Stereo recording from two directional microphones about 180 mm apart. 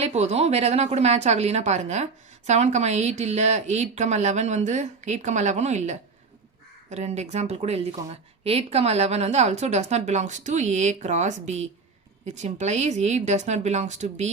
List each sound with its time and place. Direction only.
0.0 s speech: 35° right (ahead or behind)